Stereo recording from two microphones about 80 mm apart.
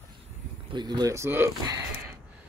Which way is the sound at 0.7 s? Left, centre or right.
Right.